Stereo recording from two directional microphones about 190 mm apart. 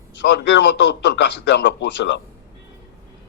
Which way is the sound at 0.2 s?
65° left (ahead or behind).